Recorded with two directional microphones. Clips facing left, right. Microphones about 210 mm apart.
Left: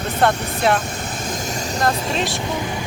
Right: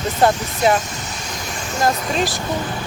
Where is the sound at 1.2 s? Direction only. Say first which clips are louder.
Left 4 dB; 45° left (ahead or behind).